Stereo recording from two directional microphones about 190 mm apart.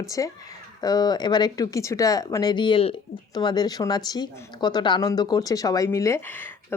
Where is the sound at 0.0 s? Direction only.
15° left (ahead or behind).